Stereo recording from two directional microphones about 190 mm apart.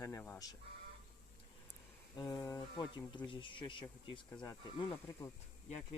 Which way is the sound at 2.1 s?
20° left (ahead or behind).